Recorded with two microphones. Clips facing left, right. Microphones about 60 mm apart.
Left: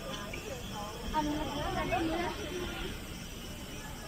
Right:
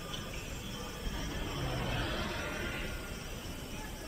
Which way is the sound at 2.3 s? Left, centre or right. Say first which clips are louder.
Even; right.